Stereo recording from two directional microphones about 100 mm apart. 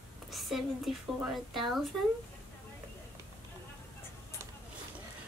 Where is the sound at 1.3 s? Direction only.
Centre (ahead or behind).